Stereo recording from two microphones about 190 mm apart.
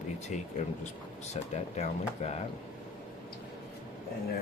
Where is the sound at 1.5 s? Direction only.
35° left (ahead or behind).